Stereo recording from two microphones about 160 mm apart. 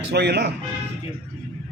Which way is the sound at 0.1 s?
90° right.